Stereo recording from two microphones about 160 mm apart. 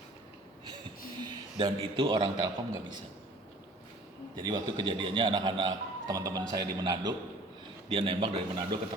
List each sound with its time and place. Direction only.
1.2 s a man's voice: 30° right (ahead or behind)
4.4 s a man's voice: 25° right (ahead or behind)